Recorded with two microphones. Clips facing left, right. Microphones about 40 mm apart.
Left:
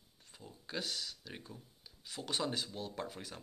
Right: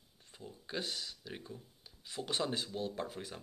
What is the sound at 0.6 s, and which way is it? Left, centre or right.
Speech, centre.